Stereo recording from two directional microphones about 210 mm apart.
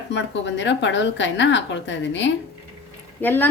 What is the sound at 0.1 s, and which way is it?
A woman's voice, 60° left (ahead or behind).